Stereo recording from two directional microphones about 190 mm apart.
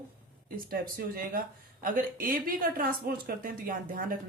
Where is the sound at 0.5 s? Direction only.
50° right (ahead or behind).